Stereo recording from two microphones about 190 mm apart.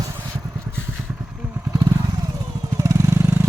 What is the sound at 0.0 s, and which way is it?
Vehicle, 15° right (ahead or behind).